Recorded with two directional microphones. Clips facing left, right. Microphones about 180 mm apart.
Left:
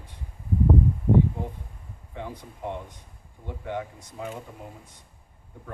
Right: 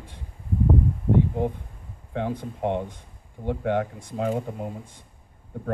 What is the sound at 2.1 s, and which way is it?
Speech, 60° right (ahead or behind).